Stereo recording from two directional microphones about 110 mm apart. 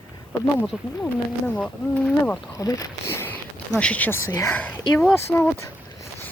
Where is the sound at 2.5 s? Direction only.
35° left (ahead or behind); by 4.2 s 15° left (ahead or behind).